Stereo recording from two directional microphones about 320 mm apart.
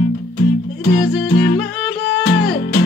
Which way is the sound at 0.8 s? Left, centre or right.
Left.